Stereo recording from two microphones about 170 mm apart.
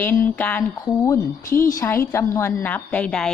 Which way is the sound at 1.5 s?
55° left (ahead or behind).